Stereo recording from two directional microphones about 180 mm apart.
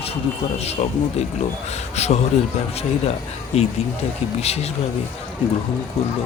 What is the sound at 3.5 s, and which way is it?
Speech, 35° left (ahead or behind).